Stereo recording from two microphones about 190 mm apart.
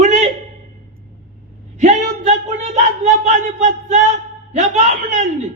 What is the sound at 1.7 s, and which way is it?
A man's voice, 40° right (ahead or behind).